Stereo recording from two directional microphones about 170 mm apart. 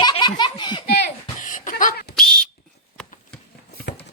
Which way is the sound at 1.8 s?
60° left (ahead or behind).